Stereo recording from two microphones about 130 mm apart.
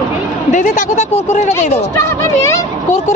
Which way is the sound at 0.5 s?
75° left (ahead or behind).